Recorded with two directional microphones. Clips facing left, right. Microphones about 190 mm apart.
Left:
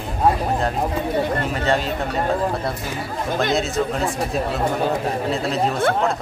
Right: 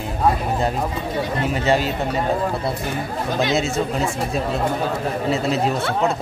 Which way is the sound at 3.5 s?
Centre (ahead or behind).